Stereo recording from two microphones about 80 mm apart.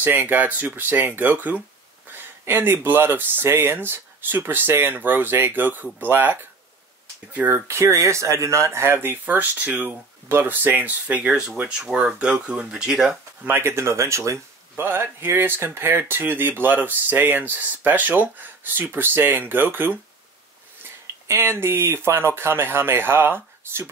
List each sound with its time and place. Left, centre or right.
0.0 s speech: right
11.8 s speech: centre
13.4 s speech: right